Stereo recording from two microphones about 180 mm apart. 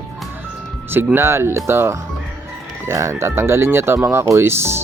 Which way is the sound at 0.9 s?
10° right (ahead or behind).